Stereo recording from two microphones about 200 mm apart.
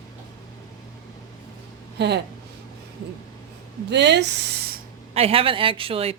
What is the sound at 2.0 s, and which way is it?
Speech, 55° right (ahead or behind).